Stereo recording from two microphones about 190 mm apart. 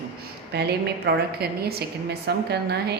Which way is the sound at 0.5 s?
60° right (ahead or behind).